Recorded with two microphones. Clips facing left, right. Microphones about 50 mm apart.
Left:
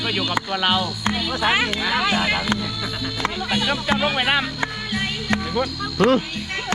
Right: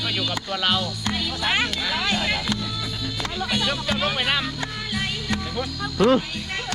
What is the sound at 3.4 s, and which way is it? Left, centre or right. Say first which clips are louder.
Speech: left 3 dB; centre.